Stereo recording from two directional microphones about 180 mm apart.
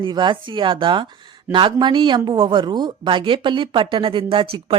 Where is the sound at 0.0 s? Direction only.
25° right (ahead or behind).